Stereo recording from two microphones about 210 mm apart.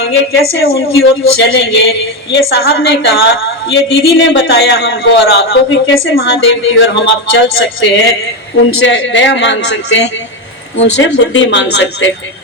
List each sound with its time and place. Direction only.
0.1 s speech: 55° left (ahead or behind)
2.3 s a woman's voice: 70° left (ahead or behind)
2.6 s speech: 55° left (ahead or behind)
3.8 s speech: 25° left (ahead or behind)
4.3 s a woman's voice: 50° left (ahead or behind)